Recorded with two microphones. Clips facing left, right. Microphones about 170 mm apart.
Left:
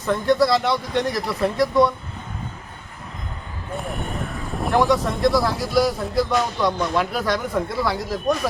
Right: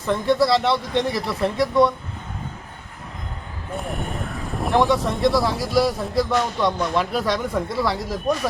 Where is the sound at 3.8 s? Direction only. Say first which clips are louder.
Even; centre (ahead or behind).